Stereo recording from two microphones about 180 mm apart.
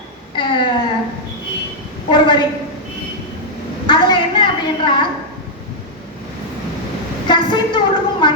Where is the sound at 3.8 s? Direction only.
25° left (ahead or behind).